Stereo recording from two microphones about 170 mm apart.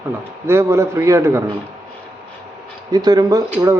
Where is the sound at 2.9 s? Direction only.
25° right (ahead or behind).